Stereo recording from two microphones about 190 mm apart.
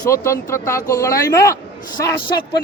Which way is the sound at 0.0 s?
15° left (ahead or behind).